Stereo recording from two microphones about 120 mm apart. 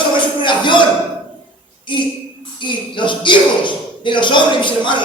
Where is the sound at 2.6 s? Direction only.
40° left (ahead or behind).